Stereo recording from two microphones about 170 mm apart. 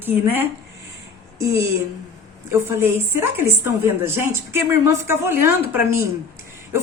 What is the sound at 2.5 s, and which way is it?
A woman's voice, 15° right (ahead or behind).